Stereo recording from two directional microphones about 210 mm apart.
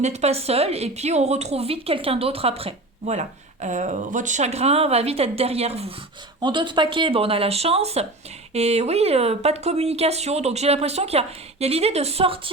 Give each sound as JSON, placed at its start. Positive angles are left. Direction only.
{"t": 0.0, "sound": "a woman's voice", "side_deg": -30}